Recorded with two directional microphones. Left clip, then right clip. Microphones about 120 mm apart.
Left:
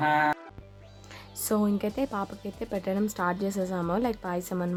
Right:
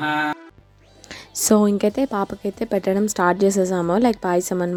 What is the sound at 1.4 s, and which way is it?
A woman's voice, 55° right (ahead or behind).